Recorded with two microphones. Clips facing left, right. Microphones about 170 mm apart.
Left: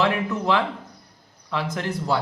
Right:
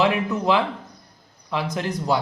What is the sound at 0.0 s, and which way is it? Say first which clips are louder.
Speech: right 2 dB; 15° right (ahead or behind).